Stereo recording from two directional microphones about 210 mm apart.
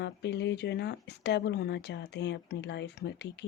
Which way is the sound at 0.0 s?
55° left (ahead or behind).